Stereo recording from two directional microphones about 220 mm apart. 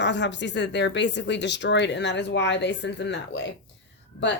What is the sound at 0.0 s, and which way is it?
Speech, 55° left (ahead or behind).